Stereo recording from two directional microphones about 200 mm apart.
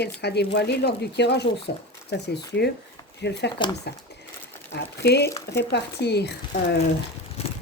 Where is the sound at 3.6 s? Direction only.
25° left (ahead or behind).